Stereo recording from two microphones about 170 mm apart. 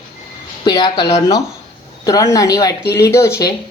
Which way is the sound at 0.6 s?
25° left (ahead or behind).